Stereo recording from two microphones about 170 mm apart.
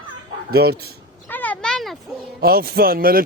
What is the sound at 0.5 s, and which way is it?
Speech, 70° right (ahead or behind).